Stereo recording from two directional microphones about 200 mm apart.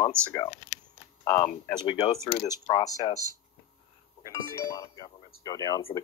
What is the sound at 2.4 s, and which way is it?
Speech, 20° left (ahead or behind).